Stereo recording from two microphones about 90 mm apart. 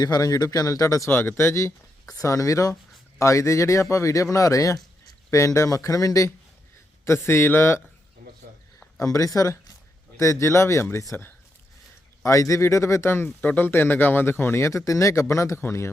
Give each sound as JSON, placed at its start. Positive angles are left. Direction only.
{"t": 0.0, "sound": "speech", "side_deg": 45}
{"t": 1.1, "sound": "speech", "side_deg": 25}
{"t": 9.0, "sound": "speech", "side_deg": 35}